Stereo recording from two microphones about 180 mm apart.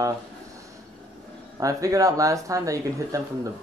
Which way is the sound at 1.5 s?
20° right (ahead or behind).